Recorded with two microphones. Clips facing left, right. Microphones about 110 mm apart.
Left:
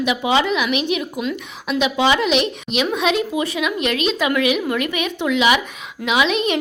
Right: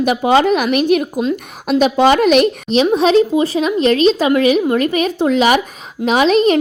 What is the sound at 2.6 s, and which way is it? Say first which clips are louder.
A woman's voice: right 7 dB; 35° right (ahead or behind).